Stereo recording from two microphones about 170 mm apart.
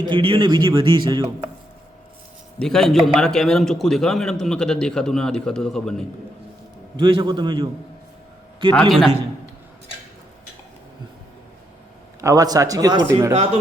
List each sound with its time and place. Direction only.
0.0 s speech: 30° right (ahead or behind)
2.6 s a man's voice: 5° left (ahead or behind)
6.9 s speech: 30° right (ahead or behind)
8.7 s a man's voice: centre (ahead or behind)
12.2 s speech: 20° right (ahead or behind)